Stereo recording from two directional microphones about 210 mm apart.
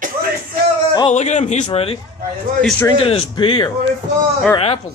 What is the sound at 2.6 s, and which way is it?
Speech, 10° left (ahead or behind).